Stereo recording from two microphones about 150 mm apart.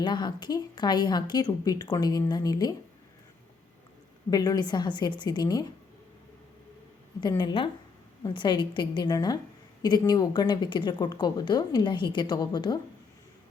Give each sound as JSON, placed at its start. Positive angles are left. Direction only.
{"t": 0.0, "sound": "a woman's voice", "side_deg": 30}
{"t": 4.3, "sound": "a woman's voice", "side_deg": 25}
{"t": 7.2, "sound": "a woman's voice", "side_deg": 30}